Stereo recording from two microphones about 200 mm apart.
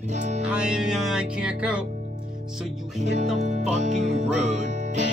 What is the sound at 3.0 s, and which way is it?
Speech, 35° right (ahead or behind).